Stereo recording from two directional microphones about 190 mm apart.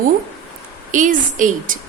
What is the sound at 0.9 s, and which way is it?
Speech, 40° right (ahead or behind).